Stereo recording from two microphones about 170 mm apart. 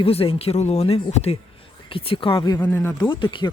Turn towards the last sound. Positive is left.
turn(degrees=30)  # may be behind; listen again after turning